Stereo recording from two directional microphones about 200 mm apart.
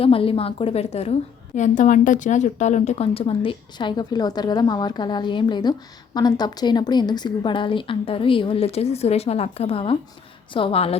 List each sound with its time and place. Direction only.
0.0 s a woman's voice: 30° left (ahead or behind)